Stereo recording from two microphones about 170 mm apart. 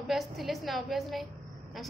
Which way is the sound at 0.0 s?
Centre (ahead or behind).